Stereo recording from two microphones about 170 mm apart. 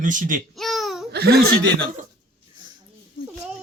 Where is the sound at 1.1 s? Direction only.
70° right (ahead or behind).